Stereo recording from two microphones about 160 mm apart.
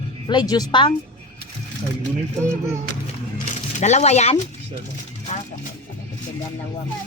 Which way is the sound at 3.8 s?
45° left (ahead or behind).